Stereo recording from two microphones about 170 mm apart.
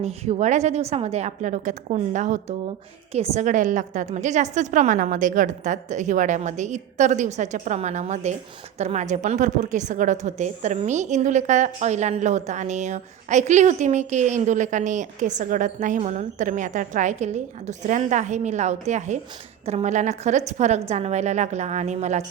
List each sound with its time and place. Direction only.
0.0 s a woman's voice: 40° right (ahead or behind)